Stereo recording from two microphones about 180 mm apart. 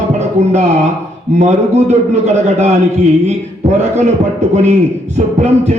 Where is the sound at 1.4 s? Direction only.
40° right (ahead or behind).